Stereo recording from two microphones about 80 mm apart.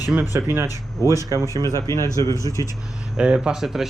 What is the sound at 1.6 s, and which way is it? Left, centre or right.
Speech, left.